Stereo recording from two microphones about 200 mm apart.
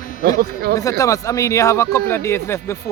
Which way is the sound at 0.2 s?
50° right (ahead or behind).